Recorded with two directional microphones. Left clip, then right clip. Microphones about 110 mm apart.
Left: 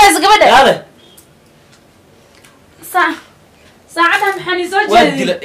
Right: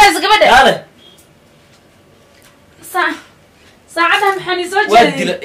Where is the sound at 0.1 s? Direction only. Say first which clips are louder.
Left 3 dB; 30° left (ahead or behind).